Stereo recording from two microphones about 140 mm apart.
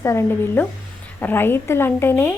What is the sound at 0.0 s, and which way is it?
A woman's voice, 20° left (ahead or behind).